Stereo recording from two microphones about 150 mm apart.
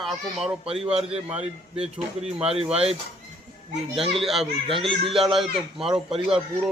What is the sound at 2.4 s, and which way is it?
Speech, 40° right (ahead or behind).